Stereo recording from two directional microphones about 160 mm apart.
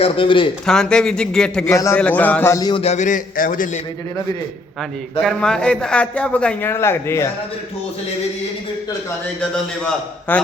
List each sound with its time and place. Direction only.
0.0 s a man's voice: 35° left (ahead or behind)
0.6 s a man's voice: 5° left (ahead or behind)
1.7 s a man's voice: 20° left (ahead or behind)
2.8 s a man's voice: 45° left (ahead or behind)
5.2 s a man's voice: 5° left (ahead or behind)
9.4 s a man's voice: 5° left (ahead or behind)